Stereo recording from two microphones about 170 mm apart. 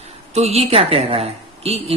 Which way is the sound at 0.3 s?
40° right (ahead or behind).